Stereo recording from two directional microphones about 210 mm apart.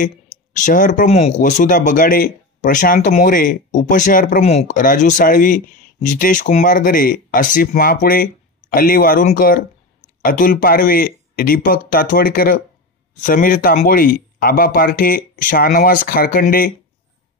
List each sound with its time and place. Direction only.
0.6 s speech: 40° left (ahead or behind)